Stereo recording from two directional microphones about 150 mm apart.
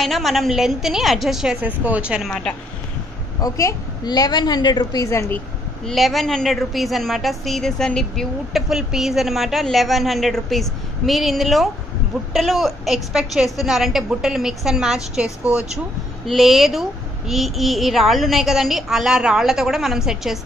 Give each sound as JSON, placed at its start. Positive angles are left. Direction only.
{"t": 0.0, "sound": "a woman's voice", "side_deg": 0}
{"t": 3.3, "sound": "a woman's voice", "side_deg": 20}
{"t": 5.9, "sound": "a woman's voice", "side_deg": 0}